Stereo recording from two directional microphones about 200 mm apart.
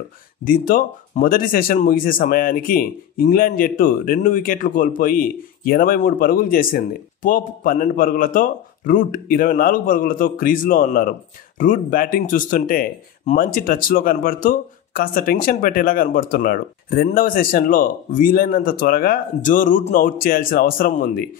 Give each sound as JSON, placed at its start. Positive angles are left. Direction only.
{"t": 0.5, "sound": "speech", "side_deg": 45}